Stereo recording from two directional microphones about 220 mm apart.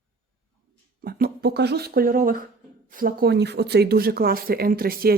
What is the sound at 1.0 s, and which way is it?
Speech, 45° right (ahead or behind).